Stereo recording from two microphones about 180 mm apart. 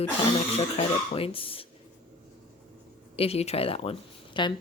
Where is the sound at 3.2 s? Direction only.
35° left (ahead or behind).